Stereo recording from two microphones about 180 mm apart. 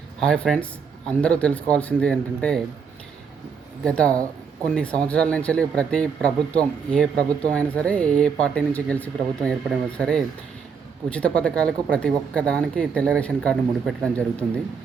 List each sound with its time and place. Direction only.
0.2 s speech: 5° left (ahead or behind)
3.8 s speech: 5° left (ahead or behind)